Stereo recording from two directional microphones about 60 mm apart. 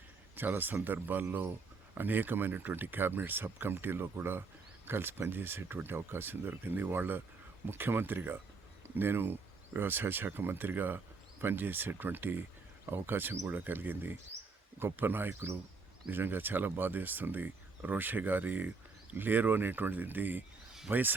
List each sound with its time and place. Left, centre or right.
0.3 s a man's voice: right